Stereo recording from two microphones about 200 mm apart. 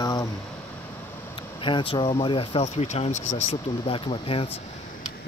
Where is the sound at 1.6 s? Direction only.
25° left (ahead or behind).